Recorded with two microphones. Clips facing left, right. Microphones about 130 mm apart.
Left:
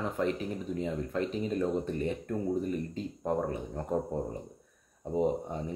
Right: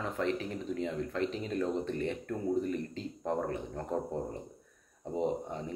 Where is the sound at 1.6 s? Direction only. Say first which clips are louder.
Right 1 dB; 15° left (ahead or behind).